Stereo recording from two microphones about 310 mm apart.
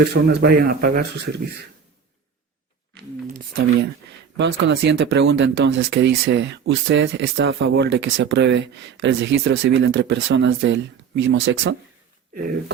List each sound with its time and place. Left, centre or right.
0.0 s speech: right
4.4 s speech: right